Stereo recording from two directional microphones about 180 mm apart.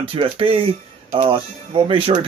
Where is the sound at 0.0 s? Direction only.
30° right (ahead or behind).